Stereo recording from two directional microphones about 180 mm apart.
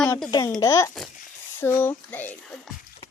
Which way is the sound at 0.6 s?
15° left (ahead or behind).